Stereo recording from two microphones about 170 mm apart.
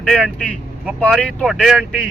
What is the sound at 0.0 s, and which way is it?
Speech, 5° left (ahead or behind).